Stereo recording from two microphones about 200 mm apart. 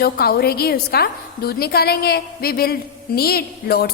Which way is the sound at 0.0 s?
50° left (ahead or behind).